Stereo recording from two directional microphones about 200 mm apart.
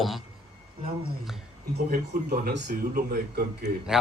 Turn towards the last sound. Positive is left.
turn(degrees=-5)  # may be behind; listen again after turning